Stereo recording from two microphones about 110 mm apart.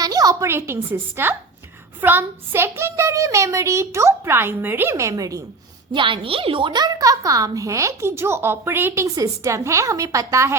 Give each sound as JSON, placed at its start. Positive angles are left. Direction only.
{"t": 0.0, "sound": "a woman's voice", "side_deg": -35}
{"t": 5.9, "sound": "a woman's voice", "side_deg": -45}